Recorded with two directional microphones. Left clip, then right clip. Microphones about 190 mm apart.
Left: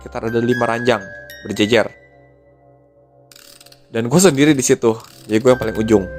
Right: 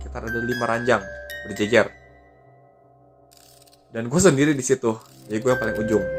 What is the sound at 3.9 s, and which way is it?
Speech, 55° left (ahead or behind).